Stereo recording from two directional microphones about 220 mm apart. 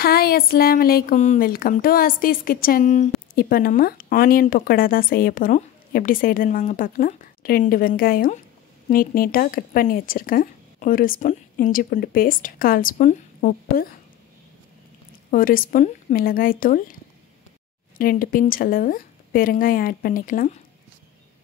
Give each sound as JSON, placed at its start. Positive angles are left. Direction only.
{"t": 0.0, "sound": "speech", "side_deg": 45}
{"t": 15.3, "sound": "speech", "side_deg": 40}
{"t": 17.9, "sound": "speech", "side_deg": 40}